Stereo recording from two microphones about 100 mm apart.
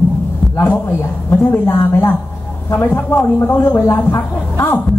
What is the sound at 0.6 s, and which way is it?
Speech, 25° left (ahead or behind).